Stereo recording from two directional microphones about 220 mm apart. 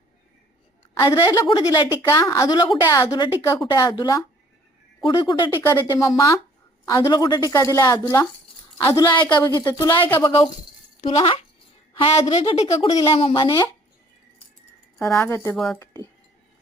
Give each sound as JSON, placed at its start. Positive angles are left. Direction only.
{"t": 0.9, "sound": "a woman's voice", "side_deg": 15}
{"t": 12.6, "sound": "a woman's voice", "side_deg": 15}
{"t": 15.1, "sound": "a woman's voice", "side_deg": 10}
{"t": 15.5, "sound": "speech", "side_deg": 0}